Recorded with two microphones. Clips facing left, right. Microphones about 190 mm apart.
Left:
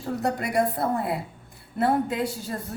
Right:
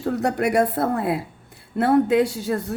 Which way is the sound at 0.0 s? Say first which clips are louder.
Right 6 dB; 70° right (ahead or behind).